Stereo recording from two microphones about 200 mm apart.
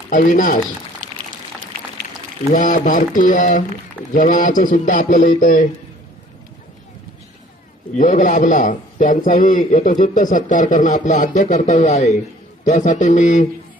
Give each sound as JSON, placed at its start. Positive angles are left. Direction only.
{"t": 0.1, "sound": "a man's voice", "side_deg": 40}
{"t": 2.5, "sound": "a man's voice", "side_deg": 40}
{"t": 7.9, "sound": "a man's voice", "side_deg": 40}